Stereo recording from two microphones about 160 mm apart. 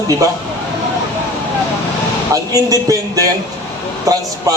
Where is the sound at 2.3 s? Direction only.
20° right (ahead or behind).